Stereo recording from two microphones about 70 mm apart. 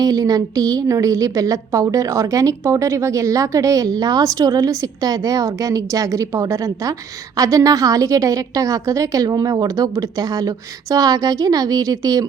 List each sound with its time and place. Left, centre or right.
0.0 s a woman's voice: right